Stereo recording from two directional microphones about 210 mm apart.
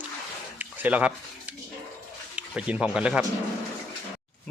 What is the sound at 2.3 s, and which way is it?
Speech, 5° right (ahead or behind).